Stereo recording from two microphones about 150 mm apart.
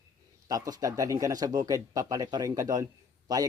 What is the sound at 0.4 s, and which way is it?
Speech, 25° right (ahead or behind).